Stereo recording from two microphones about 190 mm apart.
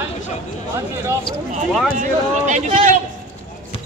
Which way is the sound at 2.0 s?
40° right (ahead or behind).